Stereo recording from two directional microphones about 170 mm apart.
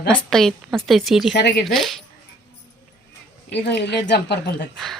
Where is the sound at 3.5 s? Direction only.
85° left.